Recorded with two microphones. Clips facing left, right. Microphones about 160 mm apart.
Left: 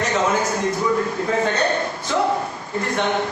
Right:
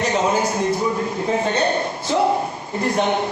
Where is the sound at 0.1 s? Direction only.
30° right (ahead or behind).